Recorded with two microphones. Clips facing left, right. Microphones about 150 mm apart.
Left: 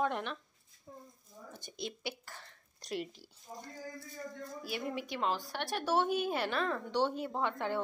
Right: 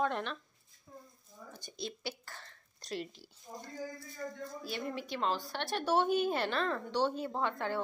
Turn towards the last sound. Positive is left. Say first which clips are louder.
# even
turn(degrees=15)  # may be behind; listen again after turning